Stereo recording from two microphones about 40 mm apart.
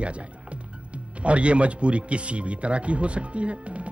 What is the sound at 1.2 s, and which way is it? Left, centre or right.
Speech, right.